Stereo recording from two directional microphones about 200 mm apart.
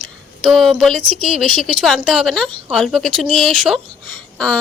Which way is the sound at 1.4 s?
Centre (ahead or behind).